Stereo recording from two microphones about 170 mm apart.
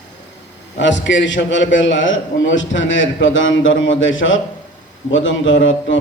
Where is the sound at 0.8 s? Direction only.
90° left.